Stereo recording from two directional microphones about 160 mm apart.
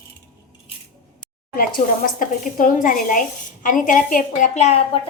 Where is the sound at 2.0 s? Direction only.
55° left (ahead or behind).